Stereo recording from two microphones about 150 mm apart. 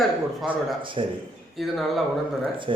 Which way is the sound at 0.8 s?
35° right (ahead or behind).